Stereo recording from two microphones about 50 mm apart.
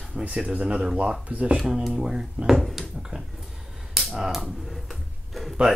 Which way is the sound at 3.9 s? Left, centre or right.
Centre.